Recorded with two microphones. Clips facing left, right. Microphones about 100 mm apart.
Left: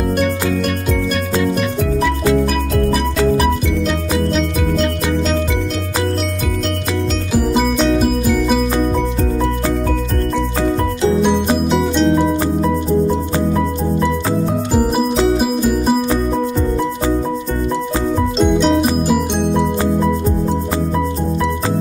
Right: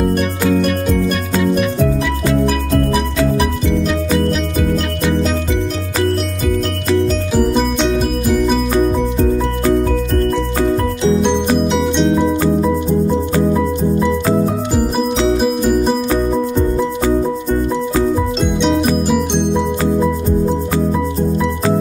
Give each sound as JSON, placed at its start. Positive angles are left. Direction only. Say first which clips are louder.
{"t": 1.3, "sound": "music", "louder": "right 2 dB", "side_deg": -5}
{"t": 7.3, "sound": "music", "louder": "left 1 dB", "side_deg": 5}
{"t": 11.2, "sound": "music", "louder": "right 1 dB", "side_deg": 5}
{"t": 15.3, "sound": "music", "louder": "right 2 dB", "side_deg": 0}
{"t": 18.4, "sound": "music", "louder": "left 4 dB", "side_deg": 0}